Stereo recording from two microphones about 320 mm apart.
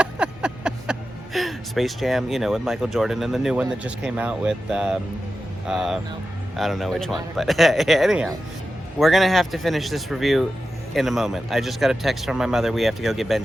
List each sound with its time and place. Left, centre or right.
0.0 s speech: centre